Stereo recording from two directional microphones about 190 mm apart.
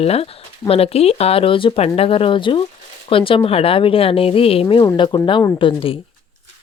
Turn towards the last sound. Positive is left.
turn(degrees=30)  # may be behind; listen again after turning